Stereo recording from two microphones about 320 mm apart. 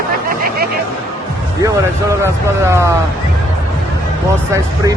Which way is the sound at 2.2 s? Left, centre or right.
Centre.